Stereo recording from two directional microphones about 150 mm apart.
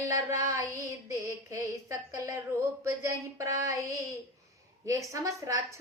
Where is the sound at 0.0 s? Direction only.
20° right (ahead or behind).